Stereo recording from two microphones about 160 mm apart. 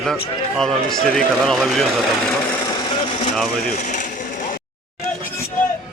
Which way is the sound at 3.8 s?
50° left (ahead or behind).